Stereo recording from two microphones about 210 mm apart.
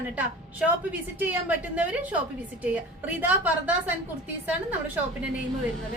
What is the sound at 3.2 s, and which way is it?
A woman's voice, 5° right (ahead or behind).